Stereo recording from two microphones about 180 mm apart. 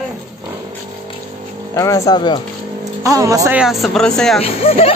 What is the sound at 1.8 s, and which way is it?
Speech, 20° left (ahead or behind).